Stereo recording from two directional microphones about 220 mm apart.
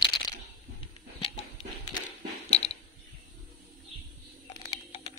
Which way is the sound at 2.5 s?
25° left (ahead or behind).